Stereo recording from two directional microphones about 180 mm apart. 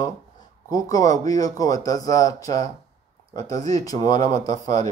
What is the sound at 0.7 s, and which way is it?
Speech, 20° left (ahead or behind).